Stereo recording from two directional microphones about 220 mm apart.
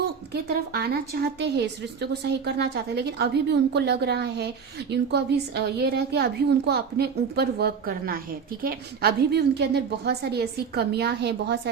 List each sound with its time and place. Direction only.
0.0 s a woman's voice: 45° right (ahead or behind)